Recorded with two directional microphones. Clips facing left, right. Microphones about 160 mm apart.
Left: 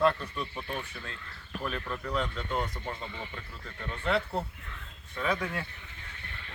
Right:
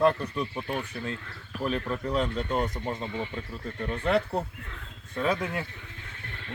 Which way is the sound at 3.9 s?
20° right (ahead or behind).